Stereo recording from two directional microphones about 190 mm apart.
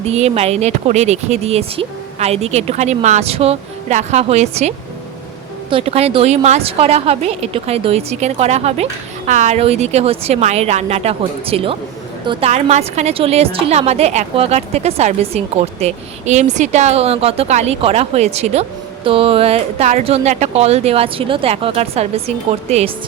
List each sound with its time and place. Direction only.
0.1 s a woman's voice: 35° right (ahead or behind)
5.7 s a woman's voice: 30° right (ahead or behind)
12.5 s a woman's voice: 35° right (ahead or behind)